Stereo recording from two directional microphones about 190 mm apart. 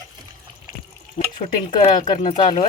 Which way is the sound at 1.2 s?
45° left (ahead or behind).